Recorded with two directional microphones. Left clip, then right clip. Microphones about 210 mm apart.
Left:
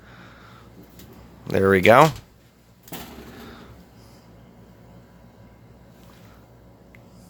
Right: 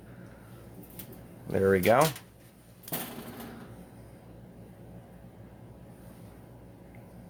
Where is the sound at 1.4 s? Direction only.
50° left (ahead or behind).